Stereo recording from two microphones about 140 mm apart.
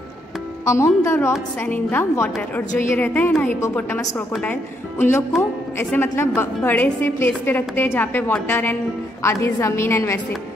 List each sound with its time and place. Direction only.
0.7 s a woman's voice: 20° left (ahead or behind)
4.3 s a woman's voice: 5° left (ahead or behind)
4.9 s a woman's voice: 15° left (ahead or behind)